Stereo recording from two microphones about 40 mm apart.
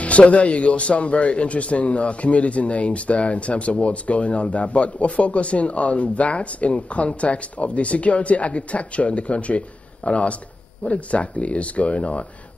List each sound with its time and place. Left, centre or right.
0.0 s speech: left